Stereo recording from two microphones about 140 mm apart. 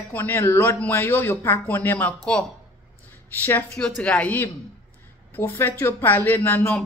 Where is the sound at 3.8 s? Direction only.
5° left (ahead or behind).